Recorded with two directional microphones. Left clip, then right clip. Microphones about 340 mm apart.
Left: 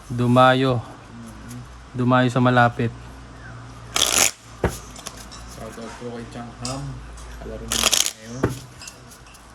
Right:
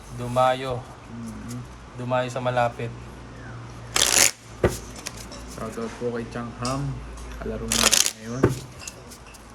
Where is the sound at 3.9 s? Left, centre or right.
Centre.